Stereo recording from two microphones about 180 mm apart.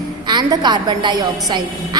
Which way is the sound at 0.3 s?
25° right (ahead or behind).